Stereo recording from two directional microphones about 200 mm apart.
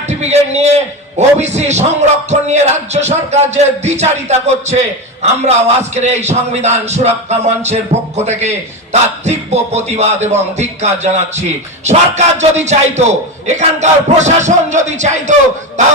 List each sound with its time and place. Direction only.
0.1 s a man's voice: 35° right (ahead or behind)